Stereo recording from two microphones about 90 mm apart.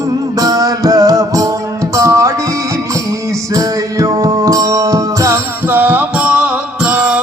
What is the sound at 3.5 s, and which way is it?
Music, 40° right (ahead or behind).